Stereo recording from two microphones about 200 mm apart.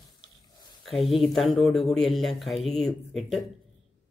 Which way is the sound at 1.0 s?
Centre (ahead or behind).